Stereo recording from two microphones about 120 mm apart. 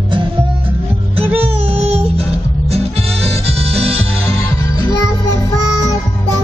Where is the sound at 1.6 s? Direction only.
55° right (ahead or behind).